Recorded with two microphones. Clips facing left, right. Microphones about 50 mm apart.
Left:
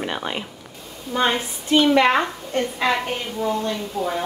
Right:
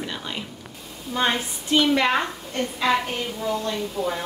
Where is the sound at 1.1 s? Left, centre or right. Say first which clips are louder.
Left 2 dB; centre.